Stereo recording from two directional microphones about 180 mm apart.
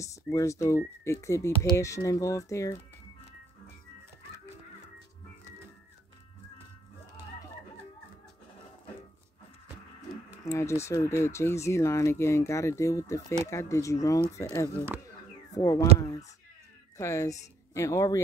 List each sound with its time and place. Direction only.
0.0 s speech: 15° left (ahead or behind)
10.4 s speech: 15° left (ahead or behind)
15.0 s a sound: 20° left (ahead or behind)
16.0 s speech: 20° left (ahead or behind)